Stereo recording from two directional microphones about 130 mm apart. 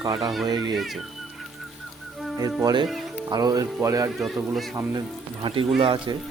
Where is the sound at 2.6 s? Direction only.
35° right (ahead or behind).